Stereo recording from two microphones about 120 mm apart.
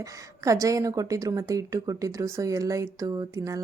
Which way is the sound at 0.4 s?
30° right (ahead or behind).